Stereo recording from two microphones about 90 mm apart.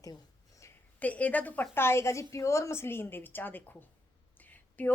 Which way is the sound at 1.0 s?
15° left (ahead or behind).